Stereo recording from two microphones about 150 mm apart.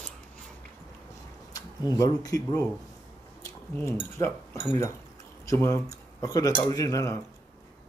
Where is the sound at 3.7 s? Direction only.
15° left (ahead or behind).